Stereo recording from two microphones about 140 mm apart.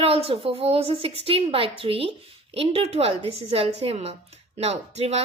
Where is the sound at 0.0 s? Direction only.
45° right (ahead or behind).